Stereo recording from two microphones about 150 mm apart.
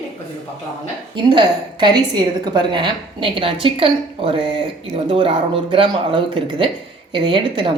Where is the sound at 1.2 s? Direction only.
30° right (ahead or behind).